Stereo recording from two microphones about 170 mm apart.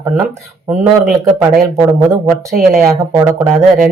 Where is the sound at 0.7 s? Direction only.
5° right (ahead or behind).